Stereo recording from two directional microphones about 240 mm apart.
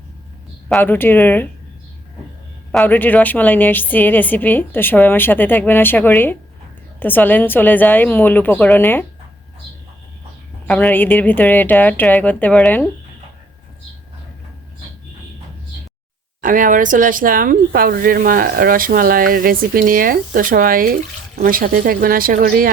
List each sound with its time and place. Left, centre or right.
0.7 s a woman's voice: centre
2.7 s a woman's voice: centre
10.7 s a woman's voice: centre
16.4 s speech: right